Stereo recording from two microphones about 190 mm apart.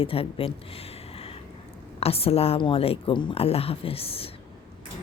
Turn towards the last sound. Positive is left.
turn(degrees=30)  # may be behind; listen again after turning